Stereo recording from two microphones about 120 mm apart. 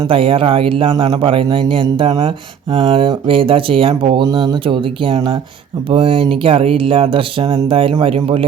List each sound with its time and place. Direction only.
0.0 s speech: 50° right (ahead or behind)